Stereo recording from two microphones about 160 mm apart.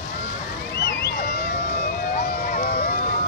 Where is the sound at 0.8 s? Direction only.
90° left.